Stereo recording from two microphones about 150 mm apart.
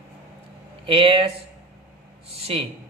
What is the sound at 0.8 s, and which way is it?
Speech, 35° right (ahead or behind).